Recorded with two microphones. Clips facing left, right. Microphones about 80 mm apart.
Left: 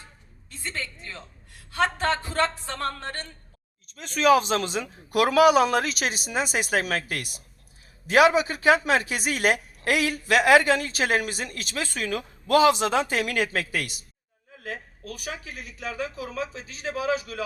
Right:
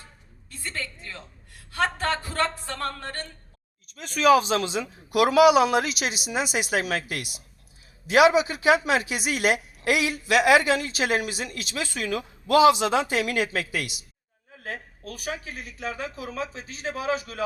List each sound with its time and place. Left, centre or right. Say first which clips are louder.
0.5 s music: even; left
1.7 s speech: left 1 dB; left
3.8 s a woman's voice: right 1 dB; left
14.6 s speech: even; right